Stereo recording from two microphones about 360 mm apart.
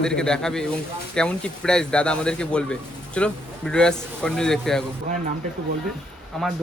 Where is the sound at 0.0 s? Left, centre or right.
Centre.